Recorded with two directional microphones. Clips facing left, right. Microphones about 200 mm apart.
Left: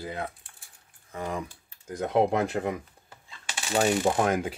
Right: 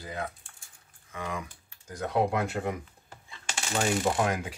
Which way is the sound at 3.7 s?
30° left (ahead or behind).